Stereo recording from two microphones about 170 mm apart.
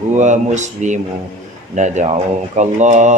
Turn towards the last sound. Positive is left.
turn(degrees=-45)  # may be behind; listen again after turning